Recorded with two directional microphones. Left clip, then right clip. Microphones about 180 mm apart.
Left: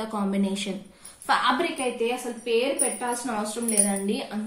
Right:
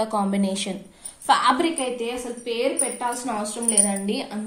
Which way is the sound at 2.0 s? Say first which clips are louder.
Left 1 dB; 40° right (ahead or behind).